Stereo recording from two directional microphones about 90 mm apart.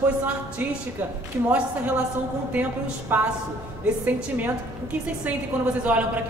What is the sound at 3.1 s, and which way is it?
A woman's voice, 20° right (ahead or behind).